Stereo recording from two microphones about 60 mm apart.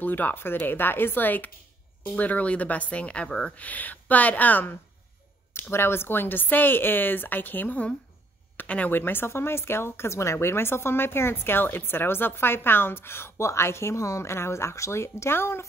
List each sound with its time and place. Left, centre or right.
0.0 s speech: left; by 3.5 s centre
3.5 s speech: left
5.5 s speech: left